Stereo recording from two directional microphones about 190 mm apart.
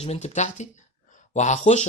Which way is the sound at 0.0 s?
35° left (ahead or behind).